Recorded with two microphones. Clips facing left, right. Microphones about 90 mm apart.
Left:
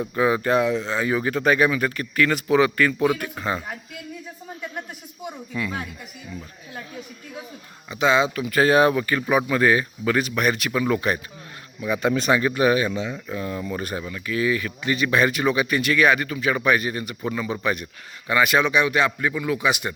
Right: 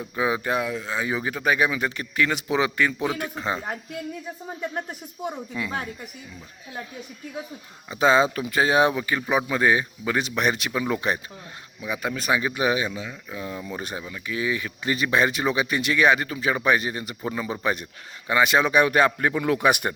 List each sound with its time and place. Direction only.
0.2 s speech: 10° right (ahead or behind)
5.5 s speech: 20° right (ahead or behind)
7.9 s speech: 35° right (ahead or behind)
8.4 s speech: 20° right (ahead or behind)
12.0 s speech: 5° right (ahead or behind)
12.9 s speech: 5° right (ahead or behind); by 18.7 s 25° right (ahead or behind)
18.7 s a man's voice: 45° right (ahead or behind)